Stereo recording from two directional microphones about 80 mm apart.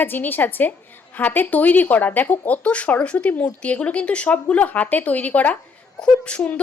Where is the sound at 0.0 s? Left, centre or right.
Left.